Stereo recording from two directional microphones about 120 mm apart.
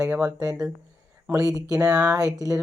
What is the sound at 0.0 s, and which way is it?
Speech, 15° right (ahead or behind).